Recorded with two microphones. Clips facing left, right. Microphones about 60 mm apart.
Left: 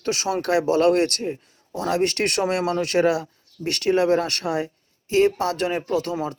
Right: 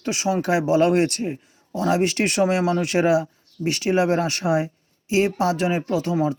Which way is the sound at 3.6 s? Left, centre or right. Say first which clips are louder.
Right 3 dB; right.